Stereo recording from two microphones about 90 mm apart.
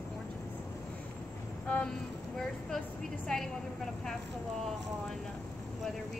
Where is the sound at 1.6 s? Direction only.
15° left (ahead or behind).